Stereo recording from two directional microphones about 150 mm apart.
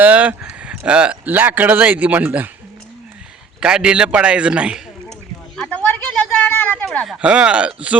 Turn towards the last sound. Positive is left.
turn(degrees=-10)  # may be behind; listen again after turning